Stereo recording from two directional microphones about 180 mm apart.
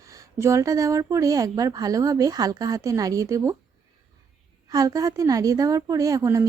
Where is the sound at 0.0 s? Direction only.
20° right (ahead or behind).